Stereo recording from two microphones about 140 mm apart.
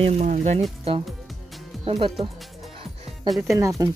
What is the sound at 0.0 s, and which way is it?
Speech, 55° right (ahead or behind).